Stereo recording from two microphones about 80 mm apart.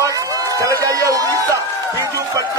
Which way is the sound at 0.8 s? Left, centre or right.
Right.